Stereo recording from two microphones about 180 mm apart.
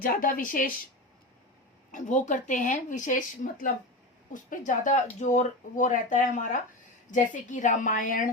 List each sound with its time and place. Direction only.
0.0 s speech: 50° left (ahead or behind)
1.9 s speech: 45° left (ahead or behind)